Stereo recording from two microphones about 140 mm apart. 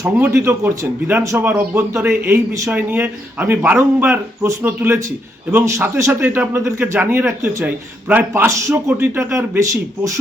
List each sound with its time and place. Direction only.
0.2 s a man's voice: 20° right (ahead or behind)